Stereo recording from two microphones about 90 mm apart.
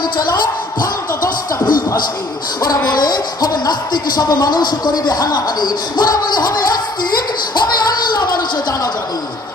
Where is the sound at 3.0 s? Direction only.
50° left (ahead or behind).